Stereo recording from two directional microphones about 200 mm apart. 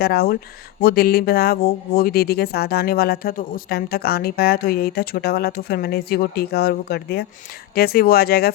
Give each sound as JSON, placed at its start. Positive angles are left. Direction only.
{"t": 0.0, "sound": "speech", "side_deg": 50}